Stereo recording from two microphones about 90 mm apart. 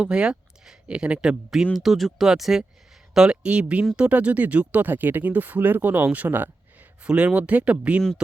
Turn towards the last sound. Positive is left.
turn(degrees=-15)  # may be behind; listen again after turning